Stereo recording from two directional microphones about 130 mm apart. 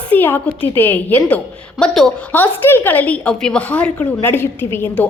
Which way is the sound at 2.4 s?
15° left (ahead or behind).